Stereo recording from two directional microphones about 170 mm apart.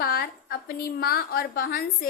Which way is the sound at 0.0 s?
60° left (ahead or behind).